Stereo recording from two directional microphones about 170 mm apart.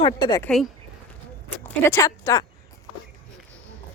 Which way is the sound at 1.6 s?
15° left (ahead or behind).